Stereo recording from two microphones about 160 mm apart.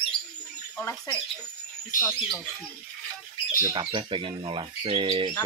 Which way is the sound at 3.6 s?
25° right (ahead or behind).